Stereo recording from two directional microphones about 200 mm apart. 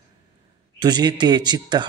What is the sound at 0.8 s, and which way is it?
A man's voice, 20° right (ahead or behind).